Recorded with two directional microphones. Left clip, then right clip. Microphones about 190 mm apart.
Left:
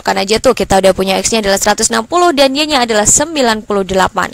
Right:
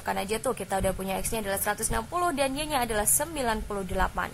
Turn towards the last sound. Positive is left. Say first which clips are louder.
# left 17 dB
turn(degrees=55)  # may be behind; listen again after turning